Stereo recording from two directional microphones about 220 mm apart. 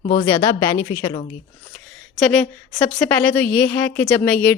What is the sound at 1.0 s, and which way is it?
Speech, 25° left (ahead or behind).